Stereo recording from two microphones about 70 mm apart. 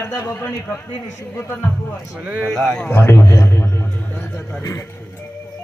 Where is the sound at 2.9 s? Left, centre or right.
Left.